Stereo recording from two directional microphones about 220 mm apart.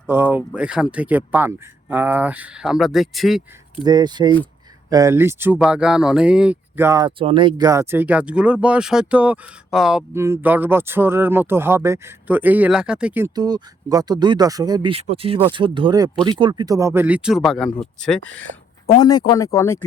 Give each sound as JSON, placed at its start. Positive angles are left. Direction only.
{"t": 0.1, "sound": "speech", "side_deg": -10}
{"t": 3.8, "sound": "speech", "side_deg": -20}
{"t": 18.9, "sound": "speech", "side_deg": 20}